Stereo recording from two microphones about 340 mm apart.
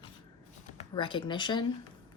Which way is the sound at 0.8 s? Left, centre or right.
Centre.